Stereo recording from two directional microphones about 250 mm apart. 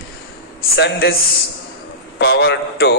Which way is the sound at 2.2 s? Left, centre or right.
Left.